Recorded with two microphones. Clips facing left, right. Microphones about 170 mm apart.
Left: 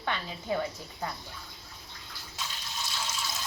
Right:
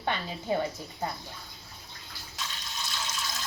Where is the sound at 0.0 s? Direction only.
30° right (ahead or behind).